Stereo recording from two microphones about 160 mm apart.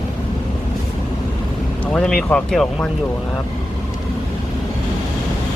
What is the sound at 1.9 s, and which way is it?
Speech, 5° left (ahead or behind).